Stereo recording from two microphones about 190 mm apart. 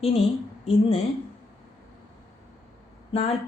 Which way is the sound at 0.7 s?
30° left (ahead or behind).